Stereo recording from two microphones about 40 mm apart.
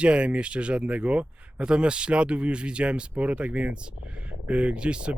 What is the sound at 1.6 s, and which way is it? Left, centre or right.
Speech, right.